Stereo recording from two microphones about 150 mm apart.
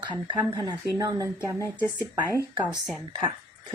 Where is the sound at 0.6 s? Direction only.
25° right (ahead or behind).